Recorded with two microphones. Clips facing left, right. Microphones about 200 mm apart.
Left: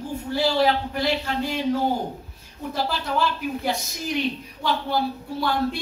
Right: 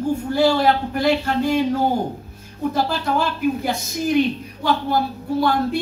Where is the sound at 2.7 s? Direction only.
50° right (ahead or behind).